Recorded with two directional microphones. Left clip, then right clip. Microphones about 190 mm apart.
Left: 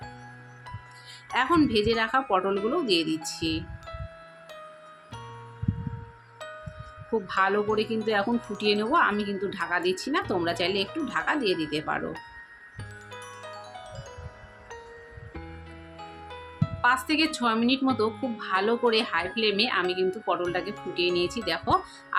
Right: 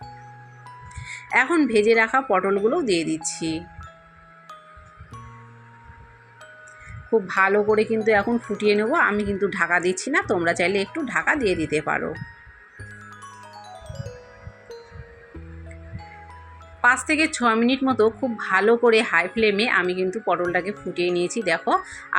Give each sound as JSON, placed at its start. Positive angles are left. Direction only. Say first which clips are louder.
{"t": 1.0, "sound": "speech", "louder": "right 6 dB", "side_deg": -20}
{"t": 2.6, "sound": "wind chime", "louder": "right 4 dB", "side_deg": -20}
{"t": 7.1, "sound": "wind chime", "louder": "right 6 dB", "side_deg": -20}
{"t": 8.0, "sound": "speech", "louder": "right 7 dB", "side_deg": -15}
{"t": 8.3, "sound": "wind chime", "louder": "right 5 dB", "side_deg": 0}
{"t": 8.5, "sound": "wind chime", "louder": "right 4 dB", "side_deg": -15}
{"t": 11.1, "sound": "speech", "louder": "right 6 dB", "side_deg": -20}
{"t": 13.1, "sound": "music", "louder": "even", "side_deg": 0}
{"t": 16.8, "sound": "wind chime", "louder": "right 5 dB", "side_deg": -20}